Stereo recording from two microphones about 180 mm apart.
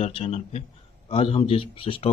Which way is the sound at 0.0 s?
35° left (ahead or behind).